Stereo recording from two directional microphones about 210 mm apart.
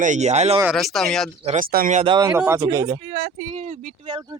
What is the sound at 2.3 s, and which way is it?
Speech, 5° right (ahead or behind).